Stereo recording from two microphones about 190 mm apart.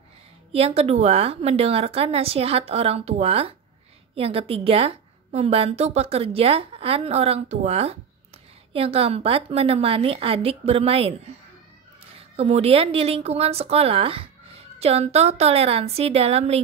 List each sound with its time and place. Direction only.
0.5 s a woman's voice: 30° right (ahead or behind)
12.2 s a woman's voice: 30° right (ahead or behind)